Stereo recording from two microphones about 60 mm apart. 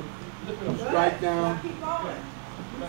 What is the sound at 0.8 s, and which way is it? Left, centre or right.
Speech, centre.